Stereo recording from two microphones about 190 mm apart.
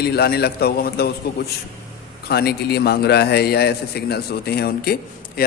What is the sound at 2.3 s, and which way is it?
A man's voice, 60° left (ahead or behind).